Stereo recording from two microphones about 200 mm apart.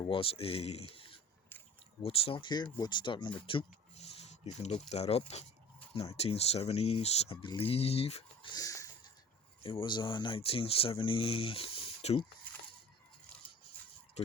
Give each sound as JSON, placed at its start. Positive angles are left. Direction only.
{"t": 0.0, "sound": "speech", "side_deg": 25}